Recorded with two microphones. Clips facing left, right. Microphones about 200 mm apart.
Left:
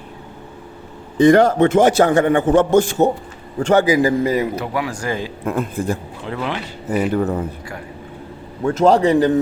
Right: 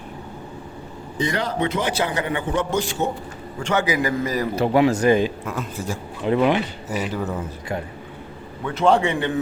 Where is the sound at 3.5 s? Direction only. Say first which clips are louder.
Left 8 dB; 35° left (ahead or behind).